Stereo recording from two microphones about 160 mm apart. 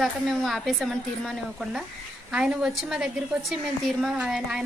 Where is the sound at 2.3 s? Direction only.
5° right (ahead or behind).